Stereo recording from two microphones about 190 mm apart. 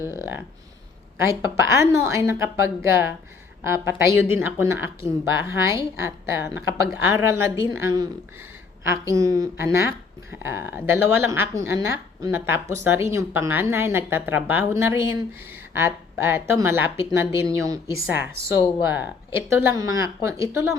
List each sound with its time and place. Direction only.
0.0 s a woman's voice: 15° right (ahead or behind)